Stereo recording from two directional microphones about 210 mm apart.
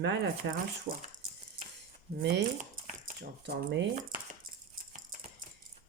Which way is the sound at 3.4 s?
55° right (ahead or behind).